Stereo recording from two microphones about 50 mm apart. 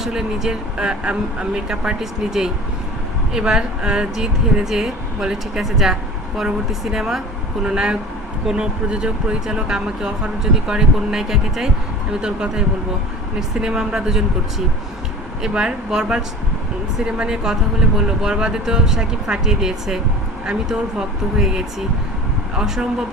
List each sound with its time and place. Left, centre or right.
0.0 s speech: centre
7.6 s speech: centre
15.4 s speech: centre
21.3 s speech: centre